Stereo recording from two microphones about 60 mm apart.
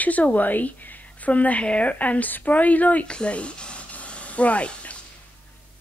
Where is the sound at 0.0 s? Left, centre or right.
Left.